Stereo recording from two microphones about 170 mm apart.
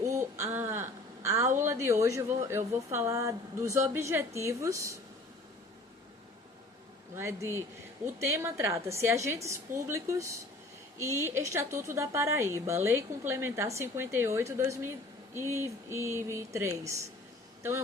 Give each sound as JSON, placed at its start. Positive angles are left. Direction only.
{"t": 0.0, "sound": "a woman's voice", "side_deg": -20}
{"t": 7.2, "sound": "a woman's voice", "side_deg": -15}